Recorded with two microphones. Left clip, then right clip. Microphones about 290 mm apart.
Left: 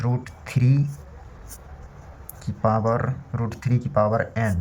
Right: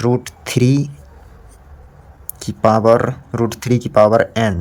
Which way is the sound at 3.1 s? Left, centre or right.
Right.